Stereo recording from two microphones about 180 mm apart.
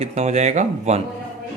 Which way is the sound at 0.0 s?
35° right (ahead or behind).